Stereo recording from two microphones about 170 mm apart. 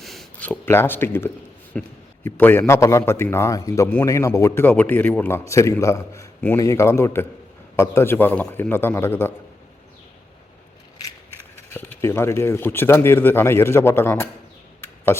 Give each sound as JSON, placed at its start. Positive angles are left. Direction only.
{"t": 0.0, "sound": "a man's voice", "side_deg": 0}
{"t": 11.5, "sound": "a man's voice", "side_deg": 15}